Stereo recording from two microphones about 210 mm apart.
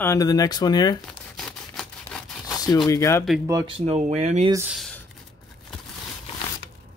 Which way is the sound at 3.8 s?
30° right (ahead or behind).